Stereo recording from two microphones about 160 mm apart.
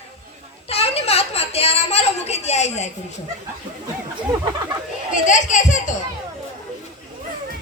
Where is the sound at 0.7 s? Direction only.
40° left (ahead or behind).